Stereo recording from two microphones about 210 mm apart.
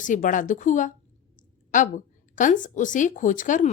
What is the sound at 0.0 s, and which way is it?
A woman's voice, 40° left (ahead or behind).